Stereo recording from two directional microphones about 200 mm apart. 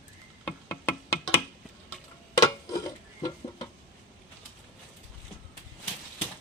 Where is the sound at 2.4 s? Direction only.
15° left (ahead or behind).